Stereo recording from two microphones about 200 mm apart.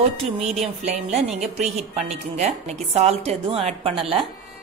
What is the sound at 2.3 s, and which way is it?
A woman's voice, 35° right (ahead or behind).